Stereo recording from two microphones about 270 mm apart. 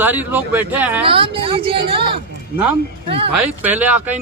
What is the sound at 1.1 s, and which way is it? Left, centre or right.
A woman's voice, centre.